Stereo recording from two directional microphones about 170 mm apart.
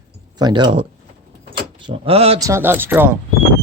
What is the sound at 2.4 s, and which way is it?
Speech, 15° right (ahead or behind).